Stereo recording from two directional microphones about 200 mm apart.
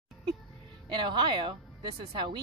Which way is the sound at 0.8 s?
20° right (ahead or behind).